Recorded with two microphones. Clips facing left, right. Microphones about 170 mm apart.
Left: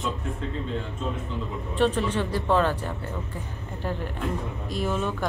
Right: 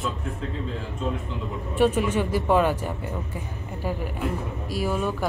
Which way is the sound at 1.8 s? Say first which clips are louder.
Right 2 dB; 10° right (ahead or behind).